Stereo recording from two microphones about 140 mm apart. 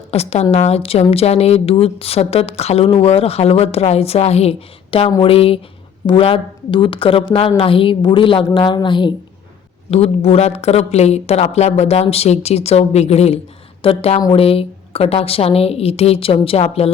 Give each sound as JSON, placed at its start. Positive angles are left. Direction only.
{"t": 0.1, "sound": "a woman's voice", "side_deg": 50}
{"t": 9.9, "sound": "a woman's voice", "side_deg": 50}